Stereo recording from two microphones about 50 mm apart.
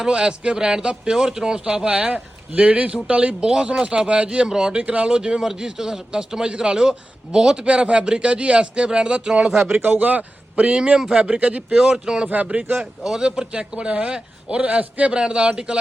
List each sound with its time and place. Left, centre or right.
0.0 s a man's voice: centre
9.8 s a man's voice: right
10.8 s speech: centre
11.2 s a man's voice: right
11.8 s speech: centre
12.3 s a man's voice: right
13.0 s a man's voice: centre